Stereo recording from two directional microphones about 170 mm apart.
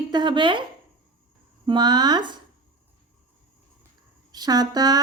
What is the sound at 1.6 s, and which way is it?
Speech, 25° right (ahead or behind).